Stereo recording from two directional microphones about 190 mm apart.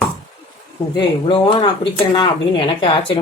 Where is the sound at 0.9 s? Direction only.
25° left (ahead or behind).